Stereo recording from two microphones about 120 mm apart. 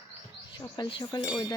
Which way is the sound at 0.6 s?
35° left (ahead or behind).